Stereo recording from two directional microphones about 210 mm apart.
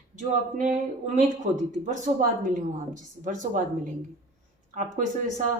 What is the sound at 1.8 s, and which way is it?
Speech, 35° right (ahead or behind).